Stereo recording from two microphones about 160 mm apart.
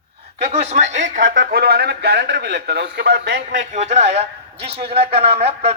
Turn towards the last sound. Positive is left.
turn(degrees=-40)  # may be behind; listen again after turning